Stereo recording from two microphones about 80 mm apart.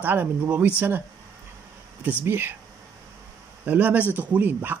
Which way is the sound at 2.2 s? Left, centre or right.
Right.